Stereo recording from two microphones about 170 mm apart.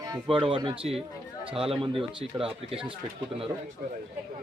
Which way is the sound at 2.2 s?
5° right (ahead or behind).